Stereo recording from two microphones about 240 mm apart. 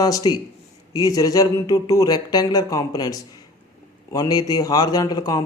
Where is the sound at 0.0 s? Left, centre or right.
Centre.